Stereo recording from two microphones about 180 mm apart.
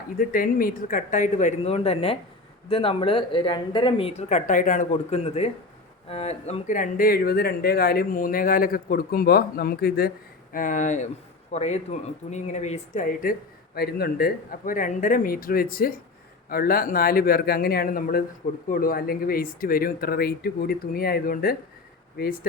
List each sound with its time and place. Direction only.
0.2 s speech: 55° left (ahead or behind); by 4.1 s 30° left (ahead or behind)
4.2 s speech: 40° left (ahead or behind); by 10.1 s 60° left (ahead or behind)
10.5 s speech: 45° left (ahead or behind)
13.7 s speech: 60° left (ahead or behind)